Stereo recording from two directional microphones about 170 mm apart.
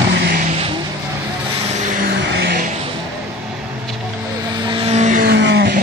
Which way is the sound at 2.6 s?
45° right (ahead or behind).